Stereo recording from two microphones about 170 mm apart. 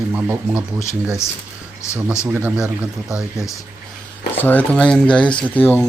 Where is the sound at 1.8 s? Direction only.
15° left (ahead or behind).